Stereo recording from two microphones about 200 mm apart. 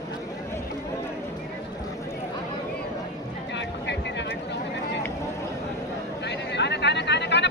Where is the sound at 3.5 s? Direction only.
60° left (ahead or behind).